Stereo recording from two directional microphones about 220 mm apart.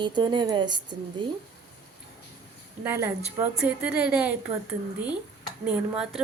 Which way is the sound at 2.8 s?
10° right (ahead or behind).